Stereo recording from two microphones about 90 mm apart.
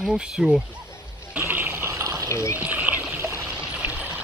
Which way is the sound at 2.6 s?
15° right (ahead or behind).